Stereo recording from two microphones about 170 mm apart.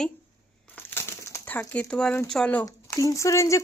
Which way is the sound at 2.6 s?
20° left (ahead or behind).